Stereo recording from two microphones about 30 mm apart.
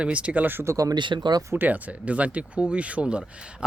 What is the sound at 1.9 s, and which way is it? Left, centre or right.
Speech, right.